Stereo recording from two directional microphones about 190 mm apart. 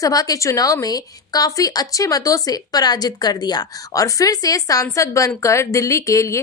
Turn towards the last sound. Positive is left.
turn(degrees=15)  # may be behind; listen again after turning